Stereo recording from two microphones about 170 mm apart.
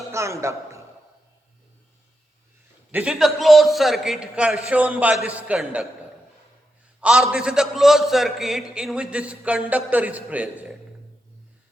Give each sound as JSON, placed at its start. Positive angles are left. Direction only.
{"t": 0.1, "sound": "a man's voice", "side_deg": -15}
{"t": 2.9, "sound": "a man's voice", "side_deg": -5}
{"t": 7.0, "sound": "a man's voice", "side_deg": -5}